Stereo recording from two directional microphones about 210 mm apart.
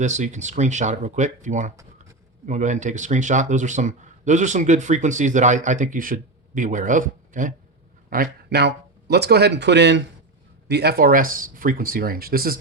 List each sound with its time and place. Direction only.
0.0 s speech: 35° right (ahead or behind)